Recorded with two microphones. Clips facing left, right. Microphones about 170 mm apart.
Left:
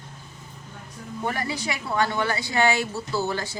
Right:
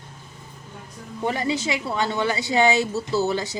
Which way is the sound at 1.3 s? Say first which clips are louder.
Right 5 dB; 20° right (ahead or behind).